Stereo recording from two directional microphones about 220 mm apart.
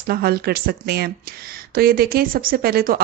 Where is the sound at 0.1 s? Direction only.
45° right (ahead or behind).